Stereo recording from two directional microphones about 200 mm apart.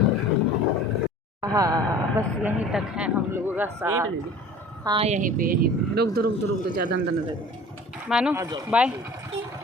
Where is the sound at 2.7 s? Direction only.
5° right (ahead or behind).